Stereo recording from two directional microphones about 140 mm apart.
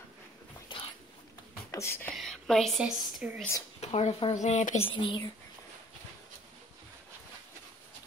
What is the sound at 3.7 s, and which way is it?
Speech, 50° left (ahead or behind).